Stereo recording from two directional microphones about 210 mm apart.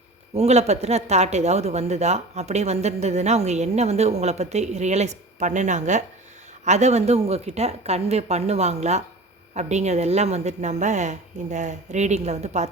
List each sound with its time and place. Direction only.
0.3 s speech: 30° right (ahead or behind)